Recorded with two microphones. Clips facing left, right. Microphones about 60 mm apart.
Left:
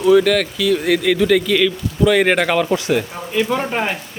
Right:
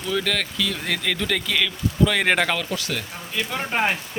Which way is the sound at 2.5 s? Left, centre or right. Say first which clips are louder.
Left 11 dB; centre.